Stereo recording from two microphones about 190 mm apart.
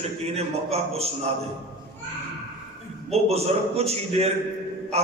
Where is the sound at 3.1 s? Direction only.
35° right (ahead or behind).